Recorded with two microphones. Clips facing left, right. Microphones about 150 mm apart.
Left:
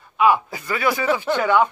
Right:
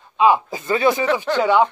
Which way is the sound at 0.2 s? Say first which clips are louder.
Right 2 dB; 20° right (ahead or behind).